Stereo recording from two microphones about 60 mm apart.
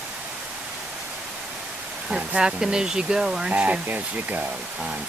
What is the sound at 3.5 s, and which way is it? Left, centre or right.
Speech, right.